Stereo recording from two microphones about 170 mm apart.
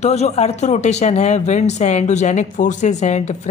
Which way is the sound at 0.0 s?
40° left (ahead or behind).